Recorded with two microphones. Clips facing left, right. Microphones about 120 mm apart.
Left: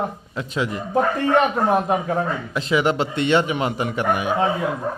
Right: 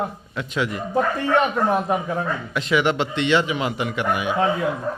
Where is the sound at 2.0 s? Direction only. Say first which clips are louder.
Left 2 dB; 35° left (ahead or behind).